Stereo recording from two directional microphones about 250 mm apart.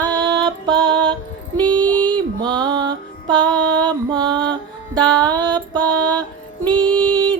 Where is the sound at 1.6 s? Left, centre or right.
Centre.